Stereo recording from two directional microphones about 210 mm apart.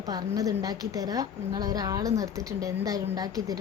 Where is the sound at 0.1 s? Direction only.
15° right (ahead or behind).